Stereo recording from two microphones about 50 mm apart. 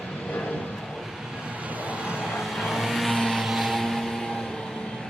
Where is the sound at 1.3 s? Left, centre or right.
Right.